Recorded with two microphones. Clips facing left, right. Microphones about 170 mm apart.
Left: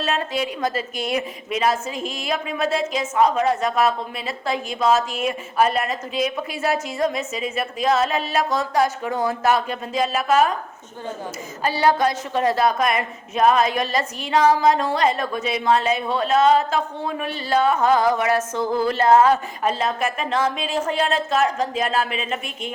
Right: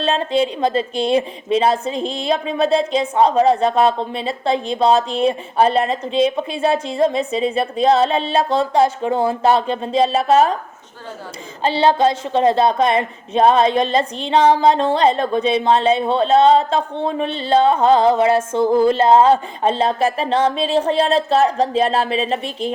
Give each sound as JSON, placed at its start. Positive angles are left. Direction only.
{"t": 0.0, "sound": "a woman's voice", "side_deg": -30}
{"t": 11.6, "sound": "a woman's voice", "side_deg": -25}